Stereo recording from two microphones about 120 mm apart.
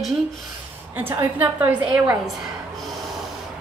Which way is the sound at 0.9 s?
15° right (ahead or behind).